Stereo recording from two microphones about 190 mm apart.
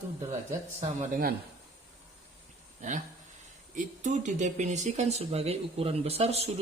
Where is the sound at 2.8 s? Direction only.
40° right (ahead or behind).